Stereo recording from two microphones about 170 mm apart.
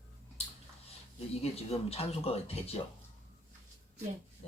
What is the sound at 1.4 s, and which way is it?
Speech, 35° left (ahead or behind).